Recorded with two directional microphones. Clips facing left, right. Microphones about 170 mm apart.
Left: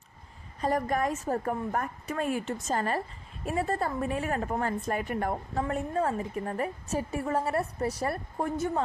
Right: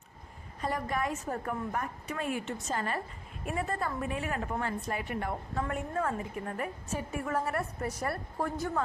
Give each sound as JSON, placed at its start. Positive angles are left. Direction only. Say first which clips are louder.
{"t": 0.6, "sound": "a woman's voice", "louder": "left 5 dB", "side_deg": 45}
{"t": 5.6, "sound": "a woman's voice", "louder": "left 5 dB", "side_deg": 30}